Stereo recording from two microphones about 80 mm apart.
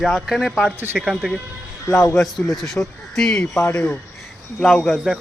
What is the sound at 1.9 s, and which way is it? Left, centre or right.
Speech, left.